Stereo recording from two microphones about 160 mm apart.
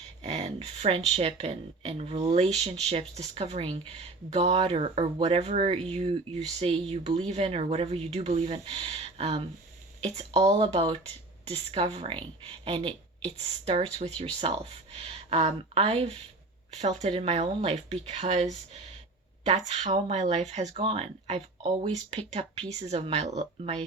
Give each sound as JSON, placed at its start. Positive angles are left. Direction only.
{"t": 0.2, "sound": "speech", "side_deg": -40}